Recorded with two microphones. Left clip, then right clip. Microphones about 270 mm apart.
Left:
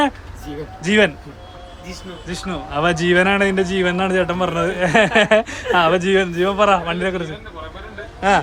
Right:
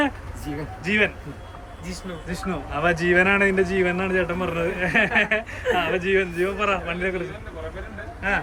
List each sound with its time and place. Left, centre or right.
0.9 s speech: centre
2.2 s speech: centre